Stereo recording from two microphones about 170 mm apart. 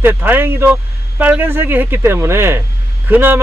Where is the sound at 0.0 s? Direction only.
10° right (ahead or behind).